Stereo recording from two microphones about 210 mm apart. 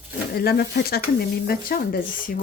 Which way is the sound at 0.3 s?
45° left (ahead or behind).